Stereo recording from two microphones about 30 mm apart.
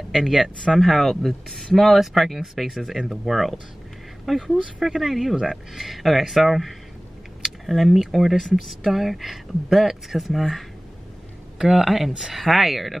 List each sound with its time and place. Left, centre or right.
0.1 s speech: centre
0.7 s speech: centre
7.4 s a sound: centre
8.1 s speech: centre
11.5 s a sound: right
11.8 s speech: centre